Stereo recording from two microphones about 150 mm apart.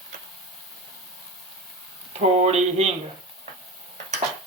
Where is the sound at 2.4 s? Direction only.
45° right (ahead or behind).